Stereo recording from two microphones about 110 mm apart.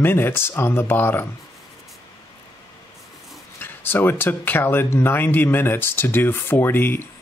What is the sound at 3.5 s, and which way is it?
Speech, 20° left (ahead or behind).